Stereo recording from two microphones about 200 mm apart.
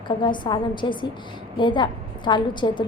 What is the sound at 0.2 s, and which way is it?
A woman's voice, 25° left (ahead or behind).